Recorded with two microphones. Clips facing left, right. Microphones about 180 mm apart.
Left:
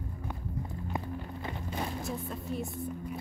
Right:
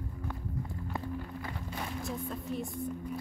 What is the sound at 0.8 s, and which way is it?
Music, 20° left (ahead or behind).